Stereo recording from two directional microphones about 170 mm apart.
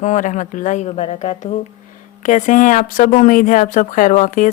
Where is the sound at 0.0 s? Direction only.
45° left (ahead or behind).